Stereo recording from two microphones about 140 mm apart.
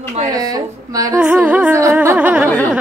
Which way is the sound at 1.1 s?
10° right (ahead or behind).